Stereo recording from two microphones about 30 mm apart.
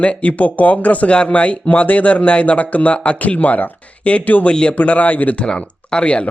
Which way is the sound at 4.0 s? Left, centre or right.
Left.